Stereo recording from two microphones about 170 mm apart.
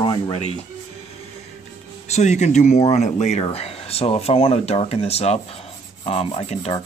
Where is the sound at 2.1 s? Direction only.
40° left (ahead or behind).